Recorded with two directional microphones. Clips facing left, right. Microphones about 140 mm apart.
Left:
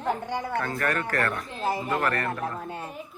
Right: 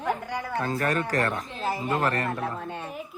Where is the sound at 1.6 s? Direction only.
15° left (ahead or behind).